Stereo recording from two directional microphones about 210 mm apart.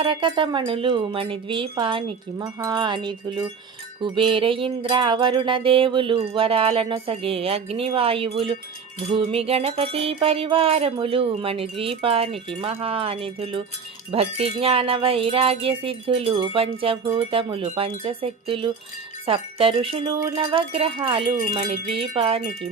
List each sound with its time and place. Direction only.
0.0 s speech: 25° right (ahead or behind)